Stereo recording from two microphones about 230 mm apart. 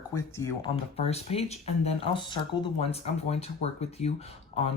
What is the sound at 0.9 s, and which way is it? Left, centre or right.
Speech, left.